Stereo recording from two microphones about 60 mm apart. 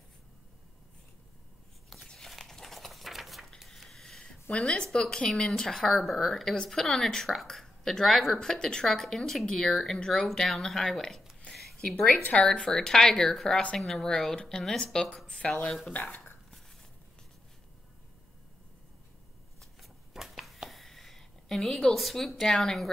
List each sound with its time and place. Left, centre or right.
2.0 s a sound: centre
4.2 s a woman's voice: centre
12.1 s a woman's voice: left
12.5 s speech: centre
15.9 s speech: left
19.6 s a sound: centre